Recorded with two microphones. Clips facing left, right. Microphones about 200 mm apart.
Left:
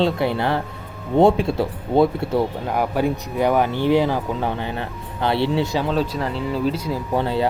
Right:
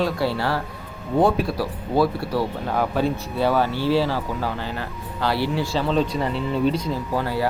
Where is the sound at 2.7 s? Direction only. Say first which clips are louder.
Left 1 dB; 10° left (ahead or behind).